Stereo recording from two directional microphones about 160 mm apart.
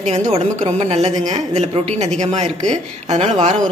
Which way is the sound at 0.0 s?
45° right (ahead or behind).